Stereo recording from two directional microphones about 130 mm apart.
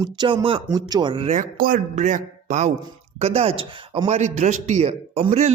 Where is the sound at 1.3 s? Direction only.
80° right.